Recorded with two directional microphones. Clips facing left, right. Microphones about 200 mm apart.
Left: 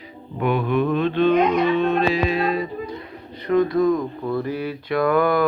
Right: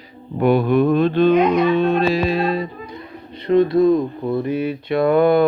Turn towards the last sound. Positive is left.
turn(degrees=-25)  # may be behind; listen again after turning